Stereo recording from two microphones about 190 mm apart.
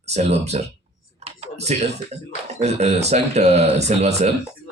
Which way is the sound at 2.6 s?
35° right (ahead or behind).